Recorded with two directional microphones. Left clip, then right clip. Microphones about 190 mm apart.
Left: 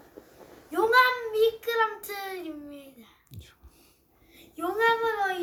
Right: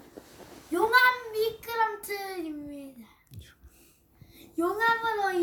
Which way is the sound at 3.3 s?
25° left (ahead or behind).